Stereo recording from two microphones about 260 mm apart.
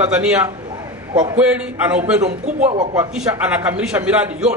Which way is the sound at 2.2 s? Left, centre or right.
Right.